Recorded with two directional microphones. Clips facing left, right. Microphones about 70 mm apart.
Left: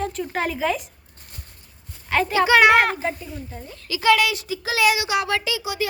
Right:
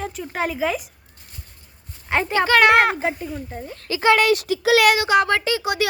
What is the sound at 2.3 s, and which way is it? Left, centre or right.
Speech, centre.